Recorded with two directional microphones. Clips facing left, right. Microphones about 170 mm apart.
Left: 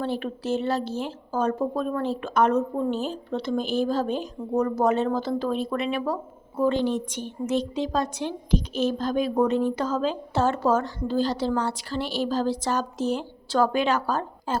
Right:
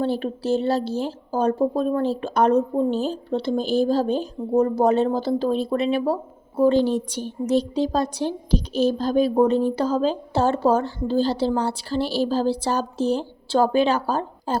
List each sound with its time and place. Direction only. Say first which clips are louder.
0.0 s a woman's voice: right 5 dB; 35° right (ahead or behind)